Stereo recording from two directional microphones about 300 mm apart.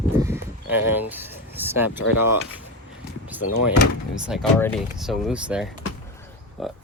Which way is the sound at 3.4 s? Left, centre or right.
Left.